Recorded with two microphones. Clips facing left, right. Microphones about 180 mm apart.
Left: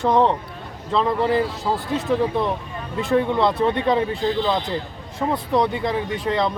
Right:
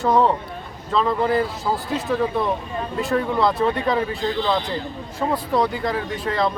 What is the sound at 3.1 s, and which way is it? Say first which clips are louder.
Speech: left 2 dB; 25° left (ahead or behind).